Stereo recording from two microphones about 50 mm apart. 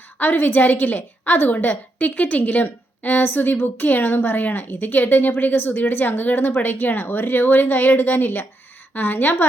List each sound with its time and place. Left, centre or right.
0.2 s a woman's voice: left